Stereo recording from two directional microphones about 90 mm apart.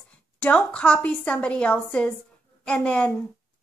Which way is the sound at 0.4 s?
10° left (ahead or behind).